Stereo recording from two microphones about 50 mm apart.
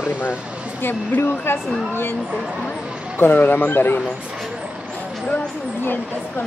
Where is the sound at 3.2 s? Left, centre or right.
Left.